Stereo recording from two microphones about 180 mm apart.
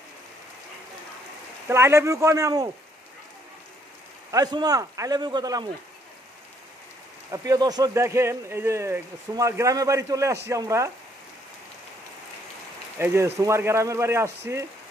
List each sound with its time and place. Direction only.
1.7 s speech: 15° right (ahead or behind)
4.3 s speech: 20° right (ahead or behind)
7.2 s speech: 20° right (ahead or behind)
13.0 s speech: 15° right (ahead or behind)